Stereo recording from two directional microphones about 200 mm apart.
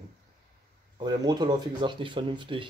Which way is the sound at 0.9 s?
20° right (ahead or behind).